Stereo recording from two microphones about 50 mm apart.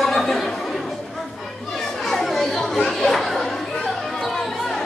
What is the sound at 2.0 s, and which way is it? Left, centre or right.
Chatter, centre.